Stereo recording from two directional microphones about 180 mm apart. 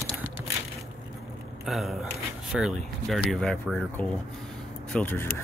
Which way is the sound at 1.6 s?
Centre (ahead or behind).